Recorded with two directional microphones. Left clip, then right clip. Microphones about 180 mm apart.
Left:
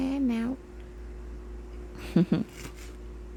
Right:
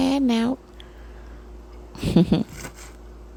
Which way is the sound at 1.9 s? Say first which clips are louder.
Right 7 dB; 20° right (ahead or behind).